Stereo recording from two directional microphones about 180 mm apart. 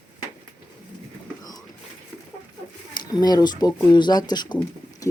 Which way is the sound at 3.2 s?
20° left (ahead or behind).